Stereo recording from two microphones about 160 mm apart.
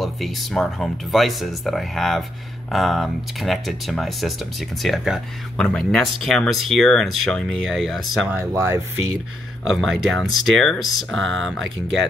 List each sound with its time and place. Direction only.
0.0 s speech: centre (ahead or behind)
8.4 s speech: 15° right (ahead or behind)
9.7 s speech: centre (ahead or behind)